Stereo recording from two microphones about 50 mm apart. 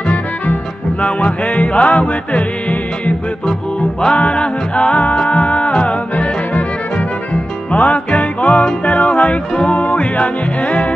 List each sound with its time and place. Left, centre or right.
0.0 s music: left